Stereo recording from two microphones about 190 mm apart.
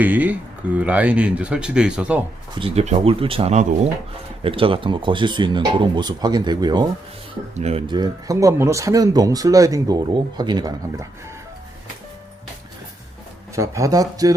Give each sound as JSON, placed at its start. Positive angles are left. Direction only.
{"t": 0.0, "sound": "speech", "side_deg": -10}
{"t": 2.6, "sound": "speech", "side_deg": -30}
{"t": 13.6, "sound": "speech", "side_deg": -15}